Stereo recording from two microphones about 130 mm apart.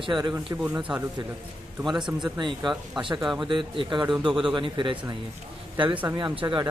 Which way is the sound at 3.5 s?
40° right (ahead or behind).